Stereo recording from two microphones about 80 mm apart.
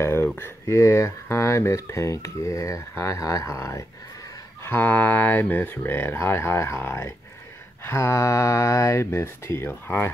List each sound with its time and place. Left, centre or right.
0.0 s a sound: left
0.4 s speech: left
4.6 s speech: left